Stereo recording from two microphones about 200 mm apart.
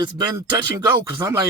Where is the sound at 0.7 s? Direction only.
15° right (ahead or behind).